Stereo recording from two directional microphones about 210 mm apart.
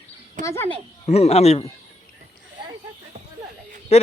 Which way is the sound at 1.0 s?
30° left (ahead or behind).